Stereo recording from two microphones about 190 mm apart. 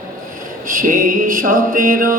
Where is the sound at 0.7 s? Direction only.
45° right (ahead or behind).